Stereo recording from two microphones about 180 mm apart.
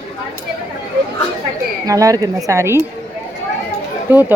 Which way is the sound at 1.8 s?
20° right (ahead or behind).